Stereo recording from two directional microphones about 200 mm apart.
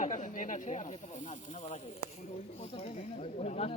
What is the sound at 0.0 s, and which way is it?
Speech, 40° left (ahead or behind).